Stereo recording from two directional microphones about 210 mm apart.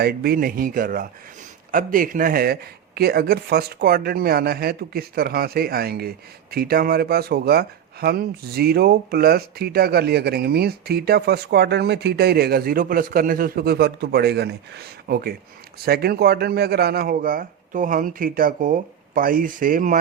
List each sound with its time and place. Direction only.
0.0 s speech: 50° right (ahead or behind)